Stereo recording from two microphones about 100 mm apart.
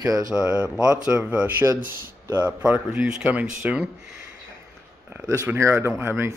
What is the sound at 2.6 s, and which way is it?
Speech, 15° right (ahead or behind).